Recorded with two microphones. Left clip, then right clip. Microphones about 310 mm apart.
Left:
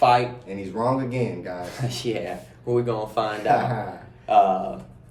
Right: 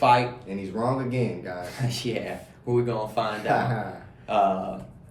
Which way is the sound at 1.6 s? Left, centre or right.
Centre.